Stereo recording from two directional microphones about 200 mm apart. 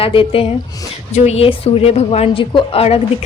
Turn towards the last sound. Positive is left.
turn(degrees=30)  # may be behind; listen again after turning